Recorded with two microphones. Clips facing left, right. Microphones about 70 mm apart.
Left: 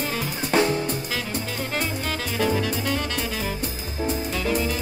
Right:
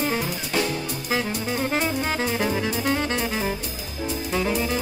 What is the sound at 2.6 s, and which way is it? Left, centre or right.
Music, right.